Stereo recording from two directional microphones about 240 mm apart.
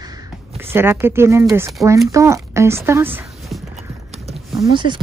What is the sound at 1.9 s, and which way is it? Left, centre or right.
Speech, centre.